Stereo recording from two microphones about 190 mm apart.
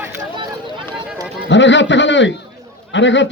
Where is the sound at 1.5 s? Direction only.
70° left (ahead or behind).